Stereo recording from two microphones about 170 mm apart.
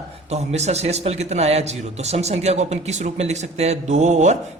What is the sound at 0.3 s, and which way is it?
A man's voice, 40° right (ahead or behind).